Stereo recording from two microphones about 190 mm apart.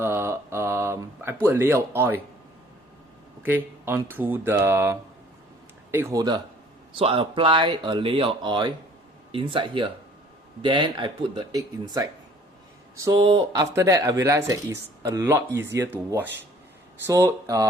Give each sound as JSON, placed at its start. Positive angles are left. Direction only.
{"t": 0.0, "sound": "a sound", "side_deg": -10}
{"t": 1.5, "sound": "speech", "side_deg": -15}
{"t": 3.4, "sound": "speech", "side_deg": -10}